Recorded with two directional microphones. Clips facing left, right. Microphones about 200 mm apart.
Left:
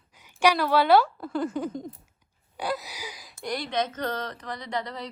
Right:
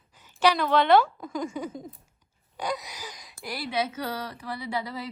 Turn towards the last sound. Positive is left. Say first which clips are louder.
# even
turn(degrees=-5)  # may be behind; listen again after turning